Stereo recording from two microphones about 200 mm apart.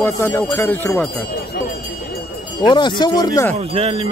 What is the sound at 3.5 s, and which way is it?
Speech, 30° right (ahead or behind).